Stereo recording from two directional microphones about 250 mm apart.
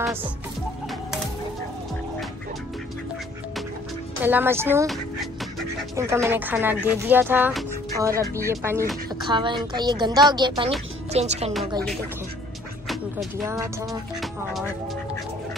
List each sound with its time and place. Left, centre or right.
4.2 s speech: centre
5.9 s speech: centre
12.8 s music: centre
13.5 s speech: centre